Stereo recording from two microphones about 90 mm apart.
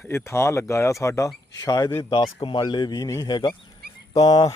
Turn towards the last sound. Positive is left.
turn(degrees=45)  # may be behind; listen again after turning